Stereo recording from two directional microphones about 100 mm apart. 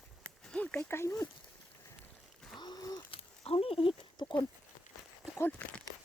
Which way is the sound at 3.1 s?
70° left (ahead or behind).